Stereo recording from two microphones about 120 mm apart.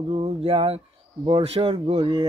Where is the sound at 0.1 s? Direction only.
50° right (ahead or behind).